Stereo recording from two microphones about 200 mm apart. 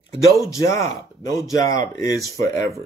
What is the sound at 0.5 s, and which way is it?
Speech, 15° left (ahead or behind).